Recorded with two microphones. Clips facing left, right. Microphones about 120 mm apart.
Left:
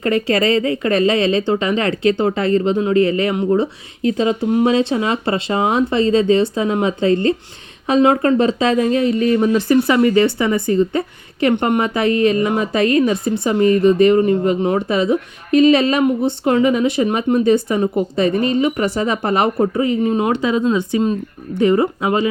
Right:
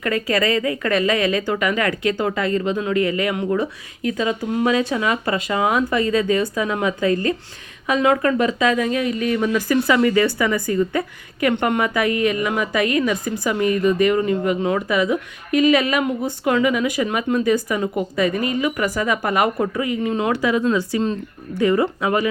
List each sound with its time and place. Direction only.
0.0 s a woman's voice: 30° left (ahead or behind)